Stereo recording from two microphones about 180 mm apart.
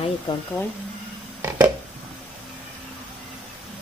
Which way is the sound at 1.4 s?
15° right (ahead or behind).